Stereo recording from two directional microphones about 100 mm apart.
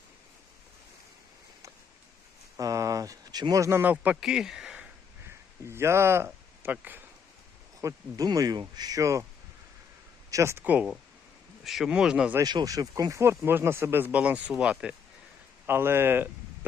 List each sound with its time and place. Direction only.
2.6 s speech: 35° right (ahead or behind)
3.9 s speech: 10° right (ahead or behind)
5.6 s speech: 25° right (ahead or behind)
7.8 s speech: 35° right (ahead or behind)
10.3 s speech: 30° right (ahead or behind)
10.6 s speech: 15° right (ahead or behind)
11.6 s speech: centre (ahead or behind)
12.4 s speech: 40° right (ahead or behind); by 14.9 s 10° right (ahead or behind)
15.6 s speech: 25° right (ahead or behind)